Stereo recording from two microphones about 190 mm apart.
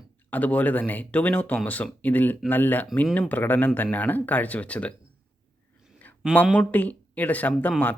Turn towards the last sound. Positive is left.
turn(degrees=10)  # may be behind; listen again after turning